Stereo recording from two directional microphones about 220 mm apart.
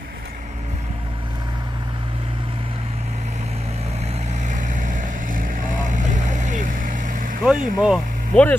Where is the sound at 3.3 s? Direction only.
30° right (ahead or behind).